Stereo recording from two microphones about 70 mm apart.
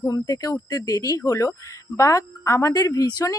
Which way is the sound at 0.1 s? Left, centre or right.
Left.